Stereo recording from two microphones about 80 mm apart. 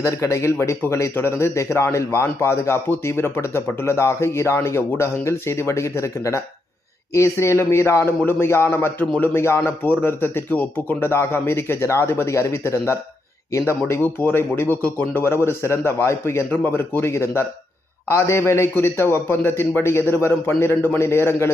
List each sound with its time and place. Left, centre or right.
0.0 s a man's voice: left